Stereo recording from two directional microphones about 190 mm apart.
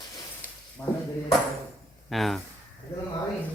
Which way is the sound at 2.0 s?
Centre (ahead or behind).